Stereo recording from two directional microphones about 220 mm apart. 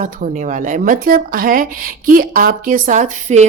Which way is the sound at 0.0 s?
35° right (ahead or behind).